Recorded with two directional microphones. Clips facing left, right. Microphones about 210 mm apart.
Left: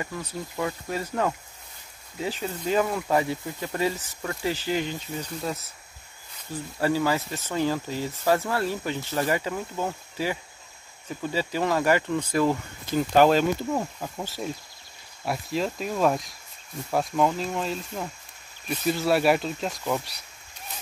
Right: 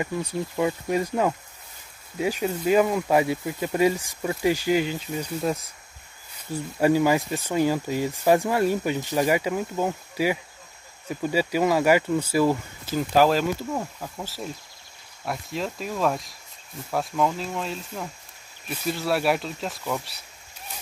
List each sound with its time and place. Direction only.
0.0 s speech: 15° right (ahead or behind)
6.8 s speech: 15° right (ahead or behind)
13.7 s speech: 10° left (ahead or behind)